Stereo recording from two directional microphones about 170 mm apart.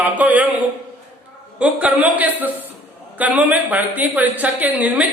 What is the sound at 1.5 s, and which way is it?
Speech, 10° right (ahead or behind).